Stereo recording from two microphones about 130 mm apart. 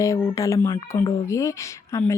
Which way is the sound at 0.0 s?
25° left (ahead or behind).